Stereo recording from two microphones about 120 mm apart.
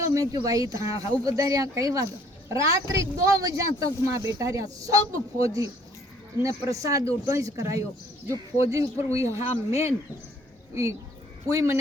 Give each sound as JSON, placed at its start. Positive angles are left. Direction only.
{"t": 0.0, "sound": "speech", "side_deg": -25}
{"t": 11.4, "sound": "speech", "side_deg": -25}